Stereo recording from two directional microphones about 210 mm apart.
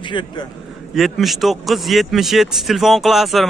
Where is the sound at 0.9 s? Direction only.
Centre (ahead or behind).